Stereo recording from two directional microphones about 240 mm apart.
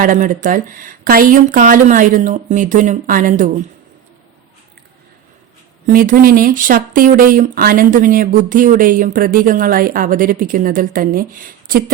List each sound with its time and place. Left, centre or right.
0.0 s speech: right
5.8 s speech: right